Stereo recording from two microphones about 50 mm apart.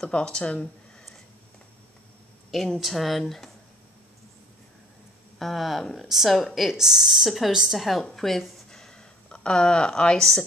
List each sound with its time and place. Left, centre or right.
0.1 s speech: left
2.5 s a woman's voice: centre
5.4 s a woman's voice: centre
8.6 s a sound: centre